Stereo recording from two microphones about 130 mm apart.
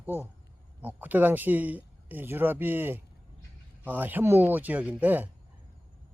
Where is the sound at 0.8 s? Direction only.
10° right (ahead or behind).